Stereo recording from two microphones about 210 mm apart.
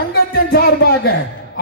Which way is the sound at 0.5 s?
45° left (ahead or behind).